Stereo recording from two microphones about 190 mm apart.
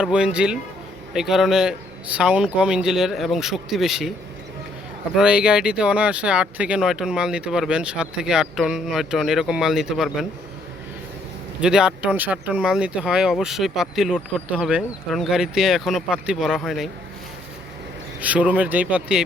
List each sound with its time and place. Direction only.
0.0 s speech: 5° right (ahead or behind)
5.1 s speech: 5° right (ahead or behind)
11.6 s speech: 5° right (ahead or behind)
18.2 s speech: 5° right (ahead or behind)